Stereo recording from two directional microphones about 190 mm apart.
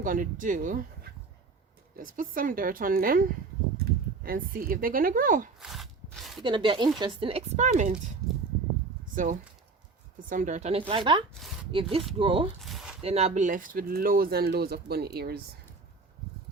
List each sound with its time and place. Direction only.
0.0 s speech: 45° right (ahead or behind)
2.0 s speech: 45° right (ahead or behind)
5.5 s a sound: centre (ahead or behind)
6.4 s speech: 25° right (ahead or behind)
9.1 s speech: 40° right (ahead or behind)
12.6 s a sound: centre (ahead or behind)
13.0 s speech: 35° right (ahead or behind); by 15.4 s 55° right (ahead or behind)